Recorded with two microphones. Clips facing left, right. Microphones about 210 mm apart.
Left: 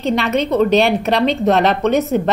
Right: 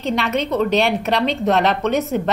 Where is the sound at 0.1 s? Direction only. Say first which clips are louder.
Left 3 dB; 35° left (ahead or behind).